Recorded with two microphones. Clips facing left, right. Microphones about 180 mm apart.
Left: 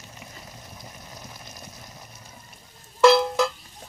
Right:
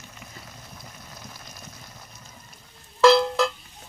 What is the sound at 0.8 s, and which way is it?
Rain, 15° left (ahead or behind).